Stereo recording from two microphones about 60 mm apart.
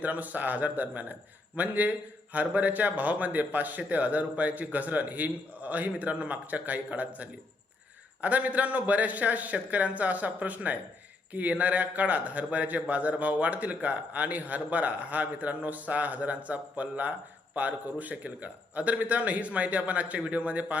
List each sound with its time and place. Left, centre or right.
0.0 s a man's voice: right